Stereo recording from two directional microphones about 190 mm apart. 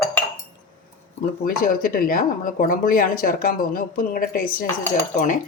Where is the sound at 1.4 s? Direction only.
50° left (ahead or behind).